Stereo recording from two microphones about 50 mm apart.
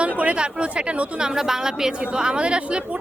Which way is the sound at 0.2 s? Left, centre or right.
Right.